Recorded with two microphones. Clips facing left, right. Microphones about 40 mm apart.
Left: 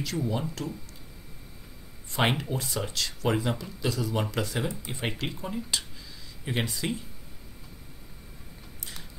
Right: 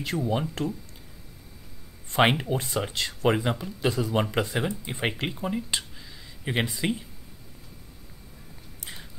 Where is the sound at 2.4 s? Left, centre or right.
Right.